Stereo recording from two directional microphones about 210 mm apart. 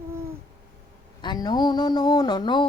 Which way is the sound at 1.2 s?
20° left (ahead or behind).